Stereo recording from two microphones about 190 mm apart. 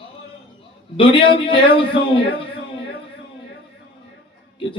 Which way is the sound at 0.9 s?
25° left (ahead or behind).